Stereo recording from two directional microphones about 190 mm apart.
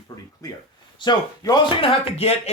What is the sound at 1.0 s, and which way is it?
Speech, 20° left (ahead or behind).